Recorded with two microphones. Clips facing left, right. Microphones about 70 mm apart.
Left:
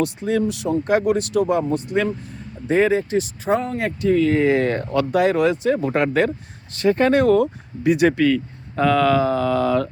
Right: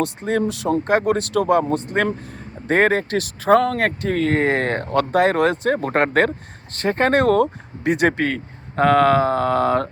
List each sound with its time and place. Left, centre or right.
0.0 s speech: right